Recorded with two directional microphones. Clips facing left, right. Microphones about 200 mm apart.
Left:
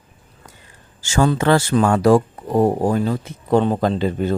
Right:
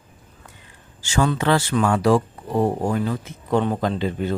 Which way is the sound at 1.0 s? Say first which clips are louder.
Left 4 dB; 40° left (ahead or behind).